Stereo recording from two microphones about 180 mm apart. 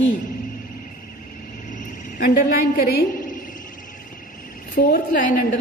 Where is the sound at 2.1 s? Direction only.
50° left (ahead or behind).